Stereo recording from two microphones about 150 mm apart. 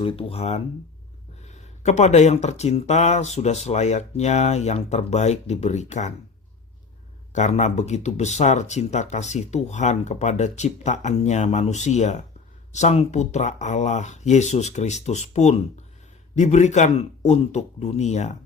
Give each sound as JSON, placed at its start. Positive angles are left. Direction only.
{"t": 0.0, "sound": "speech", "side_deg": 40}
{"t": 7.3, "sound": "speech", "side_deg": 50}